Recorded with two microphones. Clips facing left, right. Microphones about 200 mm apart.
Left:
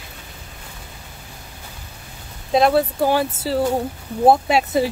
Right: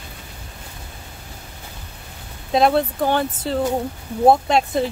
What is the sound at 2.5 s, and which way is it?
Speech, centre (ahead or behind).